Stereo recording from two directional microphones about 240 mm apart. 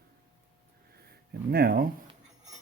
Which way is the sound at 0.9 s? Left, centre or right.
Right.